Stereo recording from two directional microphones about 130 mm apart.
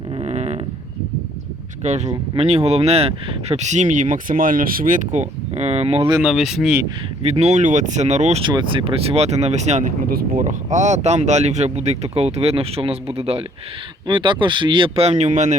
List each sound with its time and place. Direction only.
0.3 s a sound: 55° right (ahead or behind)
1.8 s speech: 60° right (ahead or behind)
2.3 s speech: 50° right (ahead or behind)
6.2 s speech: 5° right (ahead or behind)
7.2 s speech: 55° right (ahead or behind)
8.4 s speech: 40° right (ahead or behind)
14.1 s speech: 40° right (ahead or behind)
15.3 s speech: 70° right (ahead or behind)